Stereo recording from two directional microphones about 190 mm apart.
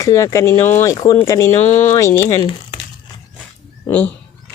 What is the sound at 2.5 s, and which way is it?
Crumpling, 30° left (ahead or behind).